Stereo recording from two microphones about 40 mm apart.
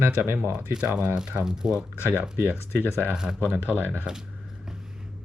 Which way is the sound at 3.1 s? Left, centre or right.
Centre.